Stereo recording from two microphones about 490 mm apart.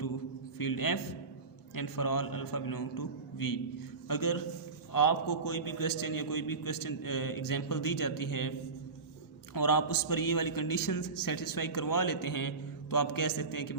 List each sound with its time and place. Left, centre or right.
0.6 s a man's voice: left
9.6 s a man's voice: left